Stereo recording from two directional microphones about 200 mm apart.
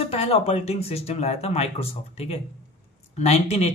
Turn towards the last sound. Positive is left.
turn(degrees=30)  # may be behind; listen again after turning